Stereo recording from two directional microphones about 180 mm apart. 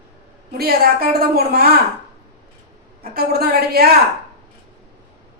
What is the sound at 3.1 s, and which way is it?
Speech, 60° right (ahead or behind).